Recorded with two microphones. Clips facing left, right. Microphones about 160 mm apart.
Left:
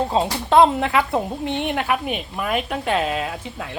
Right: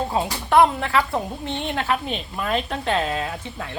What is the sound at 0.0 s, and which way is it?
A woman's voice, 25° left (ahead or behind).